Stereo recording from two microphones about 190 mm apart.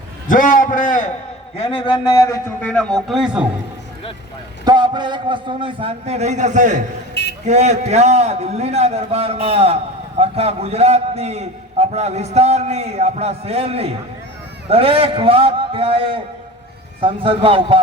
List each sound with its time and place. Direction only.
0.3 s a man's voice: 45° left (ahead or behind)
1.5 s a man's voice: 30° left (ahead or behind); by 3.4 s 5° right (ahead or behind)
4.6 s a man's voice: 25° right (ahead or behind); by 6.8 s 40° right (ahead or behind)
7.1 s a sound: 60° left (ahead or behind)
7.4 s a man's voice: 40° right (ahead or behind)